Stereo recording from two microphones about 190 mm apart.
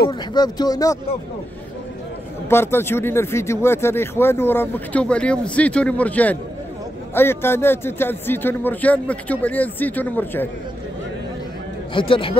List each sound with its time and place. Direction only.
0.1 s speech: 20° left (ahead or behind)
2.5 s speech: 15° left (ahead or behind)
11.9 s speech: 25° left (ahead or behind)